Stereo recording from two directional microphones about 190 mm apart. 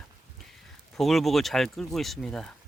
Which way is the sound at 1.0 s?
Centre (ahead or behind).